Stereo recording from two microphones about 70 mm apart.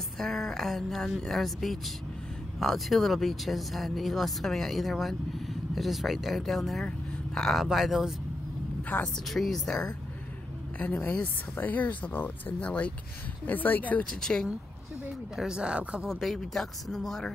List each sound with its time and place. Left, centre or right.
0.2 s speech: centre
8.8 s speech: left
9.3 s speech: centre
10.8 s speech: left
14.2 s speech: centre
15.3 s speech: centre
16.1 s speech: centre